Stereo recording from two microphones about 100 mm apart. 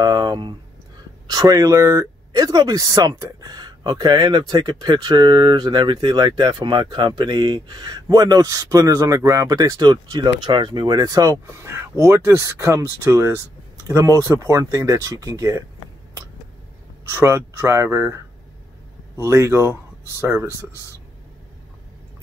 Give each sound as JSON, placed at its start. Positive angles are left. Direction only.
{"t": 0.0, "sound": "a sound", "side_deg": -45}
{"t": 1.2, "sound": "speech", "side_deg": -40}
{"t": 11.4, "sound": "speech", "side_deg": -30}
{"t": 17.1, "sound": "speech", "side_deg": -25}